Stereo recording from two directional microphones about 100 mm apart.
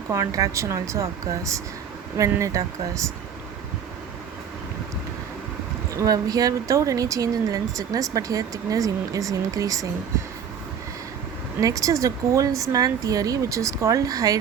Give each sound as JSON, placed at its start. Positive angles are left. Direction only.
{"t": 0.1, "sound": "speech", "side_deg": -30}
{"t": 2.4, "sound": "speech", "side_deg": -30}
{"t": 6.0, "sound": "speech", "side_deg": -35}
{"t": 11.6, "sound": "speech", "side_deg": -35}